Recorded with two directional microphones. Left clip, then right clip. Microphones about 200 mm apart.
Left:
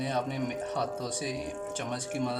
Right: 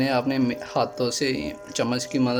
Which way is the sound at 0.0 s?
45° right (ahead or behind).